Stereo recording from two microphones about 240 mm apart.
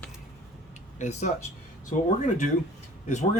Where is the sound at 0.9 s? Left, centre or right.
Left.